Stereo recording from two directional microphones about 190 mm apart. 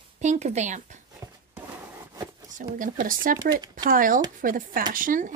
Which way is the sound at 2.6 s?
45° right (ahead or behind).